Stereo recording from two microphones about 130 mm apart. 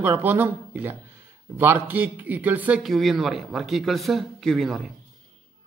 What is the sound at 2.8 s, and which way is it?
A man's voice, centre (ahead or behind).